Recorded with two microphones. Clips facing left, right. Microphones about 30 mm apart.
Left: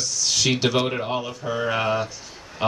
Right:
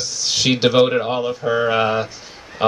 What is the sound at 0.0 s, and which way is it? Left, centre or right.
Speech, right.